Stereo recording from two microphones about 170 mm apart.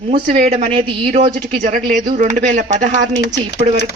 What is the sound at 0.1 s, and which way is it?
A man's voice, 30° right (ahead or behind).